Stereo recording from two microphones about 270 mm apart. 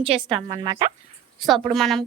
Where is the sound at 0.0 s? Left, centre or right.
Centre.